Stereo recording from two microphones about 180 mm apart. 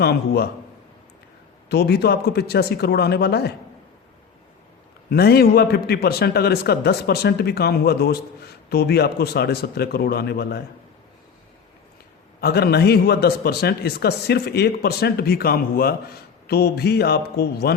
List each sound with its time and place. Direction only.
0.0 s a man's voice: 65° left (ahead or behind)
1.7 s a man's voice: 65° left (ahead or behind)
5.0 s a man's voice: 60° left (ahead or behind)
12.4 s a man's voice: 60° left (ahead or behind)